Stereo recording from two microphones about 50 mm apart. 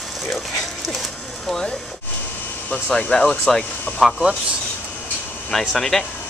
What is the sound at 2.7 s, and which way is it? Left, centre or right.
Speech, left.